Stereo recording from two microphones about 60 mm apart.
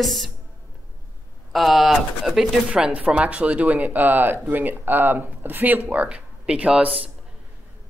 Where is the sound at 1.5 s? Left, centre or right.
Centre.